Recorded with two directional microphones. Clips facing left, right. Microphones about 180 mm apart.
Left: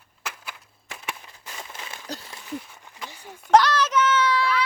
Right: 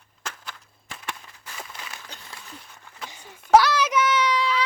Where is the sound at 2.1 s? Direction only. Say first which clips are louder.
Left 10 dB; 40° left (ahead or behind).